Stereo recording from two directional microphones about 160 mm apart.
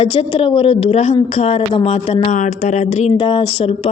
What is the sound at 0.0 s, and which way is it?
Speech, 35° left (ahead or behind).